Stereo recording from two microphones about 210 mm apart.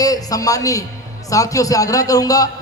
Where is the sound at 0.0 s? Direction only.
15° left (ahead or behind).